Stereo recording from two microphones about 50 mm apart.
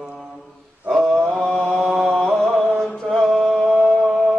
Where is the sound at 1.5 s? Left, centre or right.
Centre.